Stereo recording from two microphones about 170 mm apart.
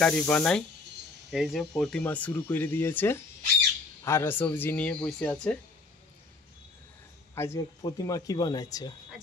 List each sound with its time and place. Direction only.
0.0 s speech: 5° left (ahead or behind)
7.3 s speech: 15° left (ahead or behind)